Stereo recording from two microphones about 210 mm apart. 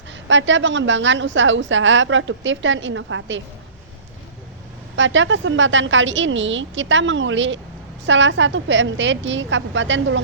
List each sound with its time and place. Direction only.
0.1 s a woman's voice: 60° right (ahead or behind)
4.9 s a woman's voice: 60° right (ahead or behind)